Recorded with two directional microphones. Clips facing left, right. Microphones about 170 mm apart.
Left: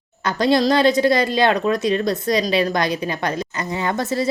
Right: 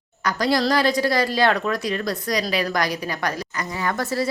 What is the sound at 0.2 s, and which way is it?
Speech, 25° left (ahead or behind).